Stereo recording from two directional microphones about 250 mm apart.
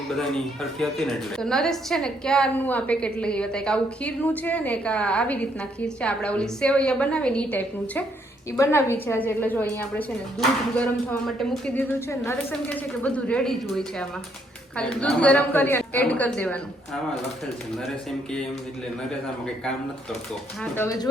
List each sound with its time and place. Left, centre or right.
0.1 s a woman's voice: centre
11.6 s a woman's voice: centre
20.7 s a woman's voice: centre